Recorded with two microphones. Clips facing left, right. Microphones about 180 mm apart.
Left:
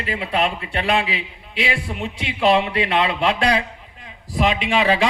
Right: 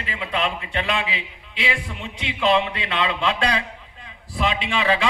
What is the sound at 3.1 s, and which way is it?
A man's voice, 15° left (ahead or behind).